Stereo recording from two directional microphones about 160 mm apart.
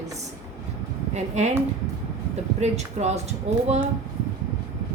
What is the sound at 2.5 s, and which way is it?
A woman's voice, 45° right (ahead or behind).